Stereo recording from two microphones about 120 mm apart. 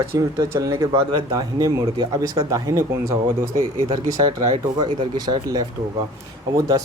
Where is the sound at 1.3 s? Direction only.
30° right (ahead or behind).